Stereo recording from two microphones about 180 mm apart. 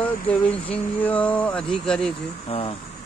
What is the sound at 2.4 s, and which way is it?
Speech, 30° left (ahead or behind).